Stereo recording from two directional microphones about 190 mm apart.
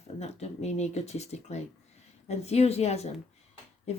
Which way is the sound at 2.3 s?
35° left (ahead or behind).